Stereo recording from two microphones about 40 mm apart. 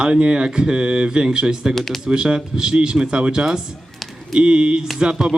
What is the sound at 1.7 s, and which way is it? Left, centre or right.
Speech, centre.